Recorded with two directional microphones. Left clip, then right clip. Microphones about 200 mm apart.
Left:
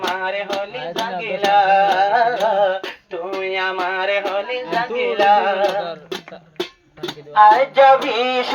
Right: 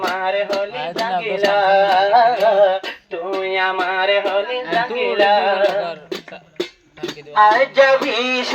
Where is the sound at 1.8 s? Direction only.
35° left (ahead or behind).